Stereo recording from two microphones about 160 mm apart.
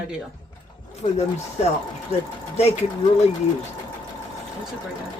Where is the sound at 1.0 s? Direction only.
45° left (ahead or behind).